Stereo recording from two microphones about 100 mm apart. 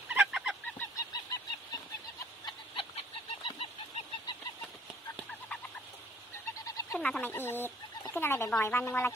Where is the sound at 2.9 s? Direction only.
65° left (ahead or behind).